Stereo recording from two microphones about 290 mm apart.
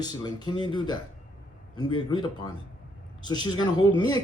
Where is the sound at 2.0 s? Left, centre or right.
Centre.